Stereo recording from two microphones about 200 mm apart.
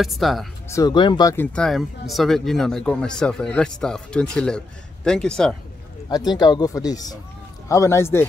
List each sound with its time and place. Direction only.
0.0 s a man's voice: centre (ahead or behind)
0.7 s speech: 15° left (ahead or behind)
1.3 s a man's voice: 5° left (ahead or behind)
6.3 s speech: 20° left (ahead or behind)